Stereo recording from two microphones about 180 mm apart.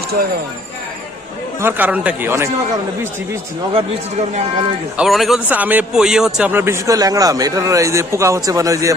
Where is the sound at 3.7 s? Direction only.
35° right (ahead or behind).